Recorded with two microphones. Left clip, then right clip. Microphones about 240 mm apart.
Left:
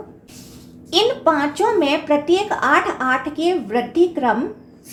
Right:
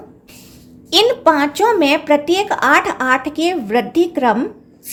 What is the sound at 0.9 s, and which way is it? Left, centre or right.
Speech, right.